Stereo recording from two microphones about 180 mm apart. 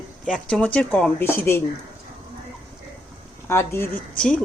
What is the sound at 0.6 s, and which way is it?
A woman's voice, 5° left (ahead or behind).